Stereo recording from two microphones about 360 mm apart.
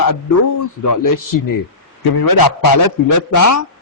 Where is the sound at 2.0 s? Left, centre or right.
Left.